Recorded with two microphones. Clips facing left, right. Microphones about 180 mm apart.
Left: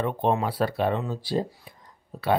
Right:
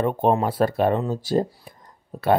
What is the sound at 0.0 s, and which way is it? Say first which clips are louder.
Speech: right 4 dB; 45° right (ahead or behind).